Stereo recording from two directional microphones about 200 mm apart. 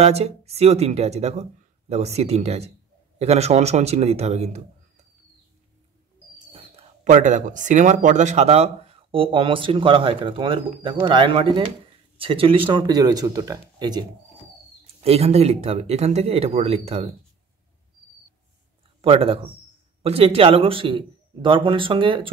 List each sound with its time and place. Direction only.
0.0 s speech: 30° right (ahead or behind)
6.5 s speech: 30° right (ahead or behind)
15.0 s speech: 30° right (ahead or behind)
18.9 s speech: 30° right (ahead or behind)